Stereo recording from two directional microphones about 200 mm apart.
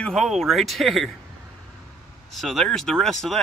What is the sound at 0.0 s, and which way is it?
Speech, centre (ahead or behind).